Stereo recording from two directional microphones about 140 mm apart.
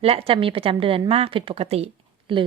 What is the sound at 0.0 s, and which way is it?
A woman's voice, 45° right (ahead or behind).